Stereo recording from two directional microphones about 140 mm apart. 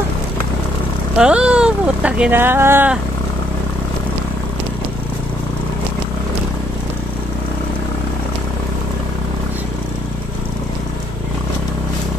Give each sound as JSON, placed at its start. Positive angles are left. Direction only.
{"t": 1.1, "sound": "speech", "side_deg": -5}